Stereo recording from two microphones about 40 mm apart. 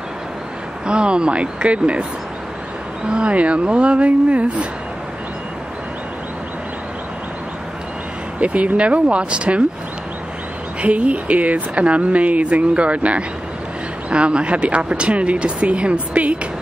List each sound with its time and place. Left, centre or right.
0.8 s speech: right
3.1 s speech: right
8.4 s speech: right
10.8 s speech: right